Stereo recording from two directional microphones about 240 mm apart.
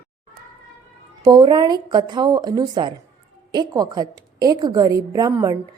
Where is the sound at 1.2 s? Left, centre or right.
Centre.